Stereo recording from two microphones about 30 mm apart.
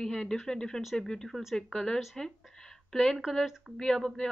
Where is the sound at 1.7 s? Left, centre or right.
Left.